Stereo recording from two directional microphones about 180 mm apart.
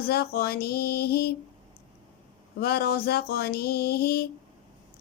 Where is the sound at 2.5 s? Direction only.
60° left (ahead or behind).